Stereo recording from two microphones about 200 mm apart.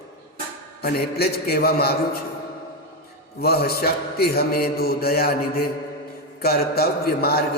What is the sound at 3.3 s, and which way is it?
A man's voice, 50° left (ahead or behind).